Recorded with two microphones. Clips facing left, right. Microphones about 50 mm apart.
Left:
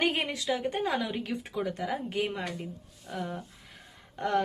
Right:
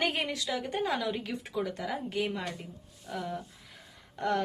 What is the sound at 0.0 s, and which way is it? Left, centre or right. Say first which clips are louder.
Speech: left 2 dB; left.